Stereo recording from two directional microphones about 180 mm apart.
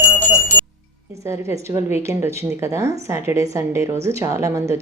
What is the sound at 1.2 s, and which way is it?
Speech, 15° right (ahead or behind).